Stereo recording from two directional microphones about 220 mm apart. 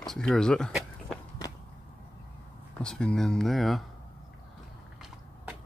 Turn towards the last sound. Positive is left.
turn(degrees=0)  # may be behind; listen again after turning